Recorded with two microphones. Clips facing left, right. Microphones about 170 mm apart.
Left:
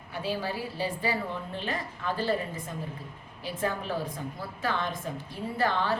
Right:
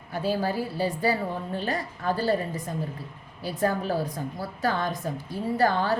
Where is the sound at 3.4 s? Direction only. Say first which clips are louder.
Right 5 dB; 40° right (ahead or behind).